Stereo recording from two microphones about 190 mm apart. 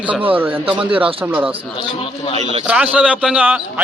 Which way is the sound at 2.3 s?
35° right (ahead or behind).